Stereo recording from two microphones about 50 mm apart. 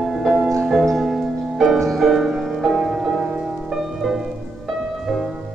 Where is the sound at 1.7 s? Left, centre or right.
Centre.